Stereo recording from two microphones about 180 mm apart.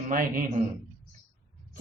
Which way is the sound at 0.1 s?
50° right (ahead or behind).